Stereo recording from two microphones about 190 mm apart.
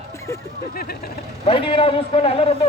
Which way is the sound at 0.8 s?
55° left (ahead or behind).